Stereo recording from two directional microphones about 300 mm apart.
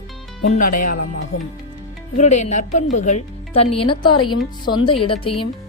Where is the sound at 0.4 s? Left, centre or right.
Left.